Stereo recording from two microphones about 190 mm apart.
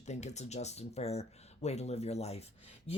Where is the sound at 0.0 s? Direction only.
35° left (ahead or behind).